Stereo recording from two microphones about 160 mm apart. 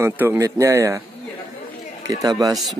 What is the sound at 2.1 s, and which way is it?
Speech, 25° right (ahead or behind).